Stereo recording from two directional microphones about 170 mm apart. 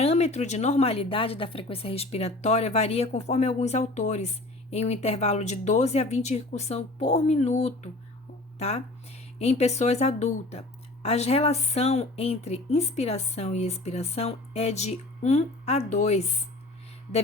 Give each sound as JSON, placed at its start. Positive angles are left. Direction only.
{"t": 0.0, "sound": "speech", "side_deg": 40}